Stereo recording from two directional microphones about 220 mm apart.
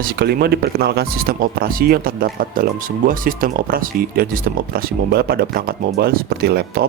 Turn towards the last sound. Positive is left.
turn(degrees=-45)  # may be behind; listen again after turning